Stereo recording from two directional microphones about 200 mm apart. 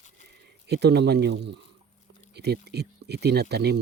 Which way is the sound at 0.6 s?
55° right (ahead or behind).